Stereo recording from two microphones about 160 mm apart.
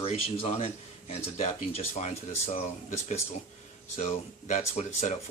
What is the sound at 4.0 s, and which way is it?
Speech, 45° left (ahead or behind).